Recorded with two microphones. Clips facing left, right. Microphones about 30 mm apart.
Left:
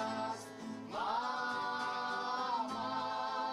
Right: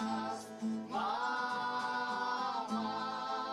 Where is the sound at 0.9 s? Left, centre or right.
Centre.